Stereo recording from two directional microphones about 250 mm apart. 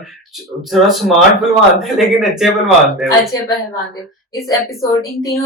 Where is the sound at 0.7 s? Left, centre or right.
Centre.